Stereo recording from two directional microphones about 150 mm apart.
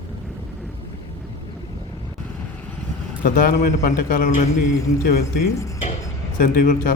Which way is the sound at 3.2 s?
65° left (ahead or behind).